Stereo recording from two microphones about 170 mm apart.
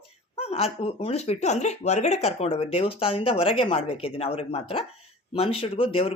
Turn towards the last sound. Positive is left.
turn(degrees=35)  # may be behind; listen again after turning